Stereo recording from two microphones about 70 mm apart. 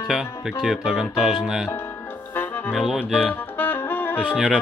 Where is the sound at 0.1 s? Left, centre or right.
Centre.